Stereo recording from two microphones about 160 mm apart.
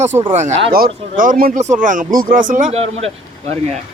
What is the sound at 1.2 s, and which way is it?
Speech, 60° right (ahead or behind).